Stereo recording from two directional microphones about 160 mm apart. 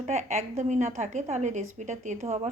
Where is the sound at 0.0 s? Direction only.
45° right (ahead or behind).